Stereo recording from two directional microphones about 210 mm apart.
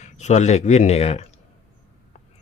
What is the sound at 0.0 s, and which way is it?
Speech, 35° left (ahead or behind).